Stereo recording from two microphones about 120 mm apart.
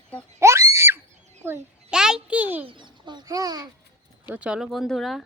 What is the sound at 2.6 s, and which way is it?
Chicken, 40° right (ahead or behind).